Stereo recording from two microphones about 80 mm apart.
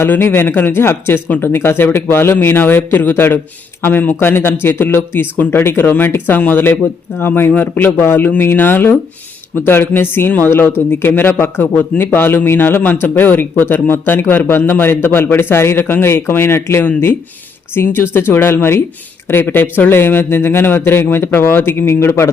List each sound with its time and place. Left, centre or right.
0.0 s a man's voice: left